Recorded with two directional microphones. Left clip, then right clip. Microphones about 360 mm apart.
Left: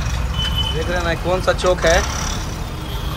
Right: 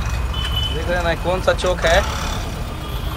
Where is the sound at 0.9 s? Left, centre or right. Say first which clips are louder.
Right 1 dB; centre.